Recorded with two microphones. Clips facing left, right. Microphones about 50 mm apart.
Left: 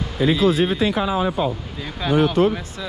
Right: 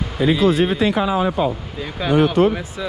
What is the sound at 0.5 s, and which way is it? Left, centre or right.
Speech, right.